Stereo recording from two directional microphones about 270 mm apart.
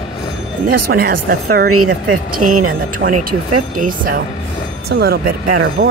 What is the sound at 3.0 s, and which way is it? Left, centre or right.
Speech, right.